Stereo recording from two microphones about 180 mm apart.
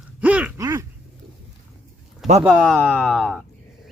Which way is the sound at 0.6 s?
20° right (ahead or behind).